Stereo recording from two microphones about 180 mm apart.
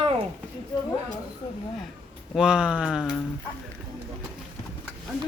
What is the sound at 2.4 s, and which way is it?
Speech, 5° right (ahead or behind).